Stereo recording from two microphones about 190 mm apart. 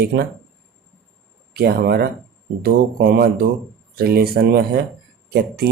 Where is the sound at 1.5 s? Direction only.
55° right (ahead or behind).